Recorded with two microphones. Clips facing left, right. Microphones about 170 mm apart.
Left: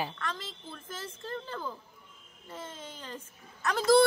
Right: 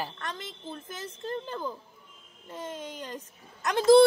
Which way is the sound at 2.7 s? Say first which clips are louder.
Right 7 dB; 15° right (ahead or behind).